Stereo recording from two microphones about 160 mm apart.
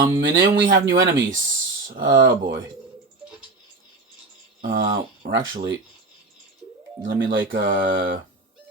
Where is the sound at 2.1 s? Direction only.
90° right.